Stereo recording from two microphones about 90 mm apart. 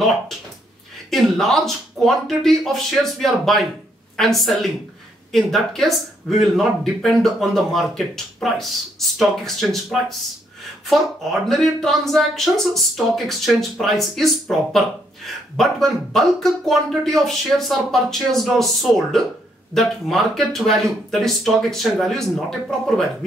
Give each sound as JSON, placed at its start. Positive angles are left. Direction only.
{"t": 1.1, "sound": "speech", "side_deg": 0}
{"t": 11.4, "sound": "speech", "side_deg": 5}